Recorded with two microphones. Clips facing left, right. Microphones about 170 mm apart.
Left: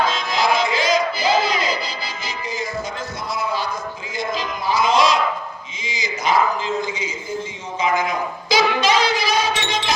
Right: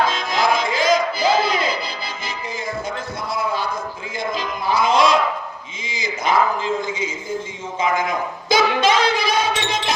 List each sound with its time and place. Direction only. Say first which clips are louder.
0.1 s music: even; 50° right (ahead or behind)
4.2 s music: even; 55° right (ahead or behind)
5.8 s a sound: even; 55° right (ahead or behind)